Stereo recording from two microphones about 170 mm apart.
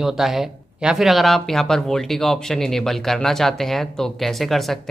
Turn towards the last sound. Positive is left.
turn(degrees=0)  # may be behind; listen again after turning